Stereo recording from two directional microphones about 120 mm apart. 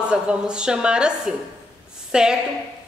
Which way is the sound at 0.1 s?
10° right (ahead or behind).